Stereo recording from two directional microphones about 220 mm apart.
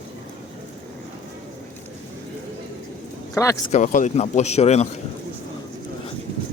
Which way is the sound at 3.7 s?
35° left (ahead or behind).